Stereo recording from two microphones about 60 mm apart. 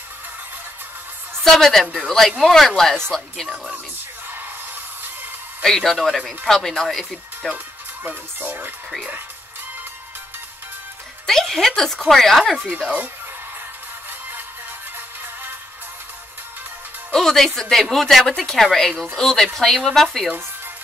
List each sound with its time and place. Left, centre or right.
1.4 s a woman's voice: centre
5.6 s speech: centre
7.5 s speech: right
11.2 s speech: centre
12.5 s speech: right
17.1 s speech: centre